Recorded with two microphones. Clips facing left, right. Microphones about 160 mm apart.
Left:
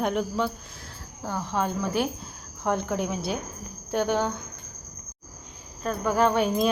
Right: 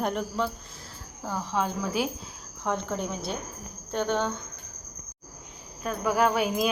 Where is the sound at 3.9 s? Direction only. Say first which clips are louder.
Left 2 dB; 10° left (ahead or behind).